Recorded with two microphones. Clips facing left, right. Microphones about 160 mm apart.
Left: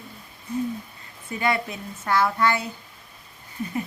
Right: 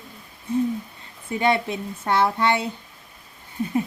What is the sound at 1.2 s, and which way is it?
Speech, 25° right (ahead or behind).